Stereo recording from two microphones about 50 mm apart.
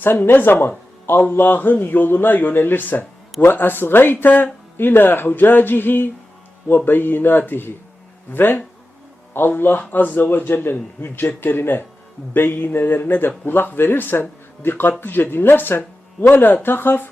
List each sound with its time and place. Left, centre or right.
0.0 s speech: left